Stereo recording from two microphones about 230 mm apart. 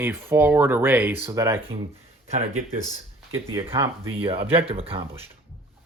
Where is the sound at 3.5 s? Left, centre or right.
Right.